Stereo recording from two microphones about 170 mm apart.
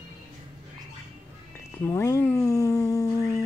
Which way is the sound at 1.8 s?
15° left (ahead or behind).